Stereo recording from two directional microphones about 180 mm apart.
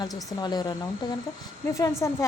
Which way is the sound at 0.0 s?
20° left (ahead or behind).